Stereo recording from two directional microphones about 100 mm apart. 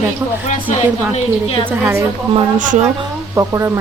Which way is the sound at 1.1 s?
70° left (ahead or behind).